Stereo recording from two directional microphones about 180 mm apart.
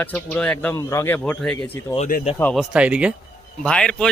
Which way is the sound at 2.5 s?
5° right (ahead or behind).